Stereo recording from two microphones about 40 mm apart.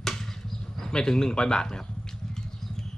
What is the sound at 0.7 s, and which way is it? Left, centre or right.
Speech, centre.